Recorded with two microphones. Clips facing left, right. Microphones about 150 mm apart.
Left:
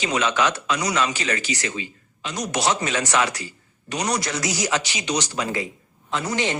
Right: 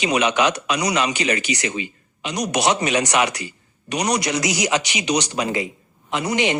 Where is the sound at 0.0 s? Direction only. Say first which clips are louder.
Right 3 dB; 15° right (ahead or behind).